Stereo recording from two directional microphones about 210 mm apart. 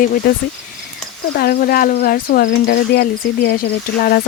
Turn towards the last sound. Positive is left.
turn(degrees=45)  # may be behind; listen again after turning